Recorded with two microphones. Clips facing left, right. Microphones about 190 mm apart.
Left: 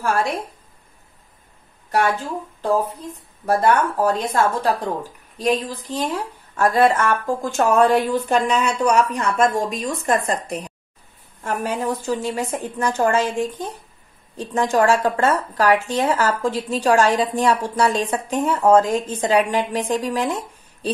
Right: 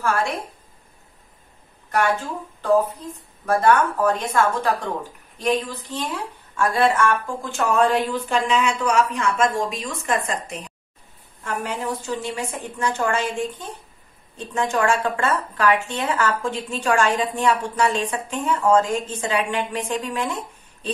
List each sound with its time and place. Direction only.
2.6 s a woman's voice: 35° left (ahead or behind)